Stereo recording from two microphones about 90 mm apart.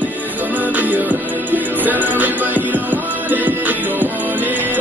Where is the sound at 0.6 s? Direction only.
20° right (ahead or behind).